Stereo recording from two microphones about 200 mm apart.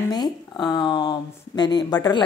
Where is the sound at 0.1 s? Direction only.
20° left (ahead or behind).